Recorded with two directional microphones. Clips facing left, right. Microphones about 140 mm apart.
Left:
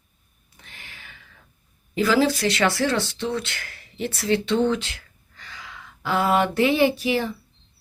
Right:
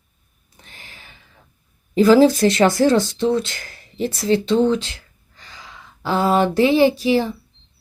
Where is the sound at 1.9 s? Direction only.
40° right (ahead or behind).